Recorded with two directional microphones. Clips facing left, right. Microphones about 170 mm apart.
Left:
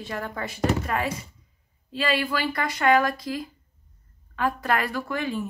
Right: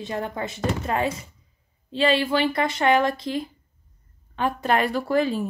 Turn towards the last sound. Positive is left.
turn(degrees=-35)  # may be behind; listen again after turning